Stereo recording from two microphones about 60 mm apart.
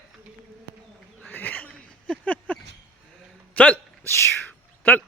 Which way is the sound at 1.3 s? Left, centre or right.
Left.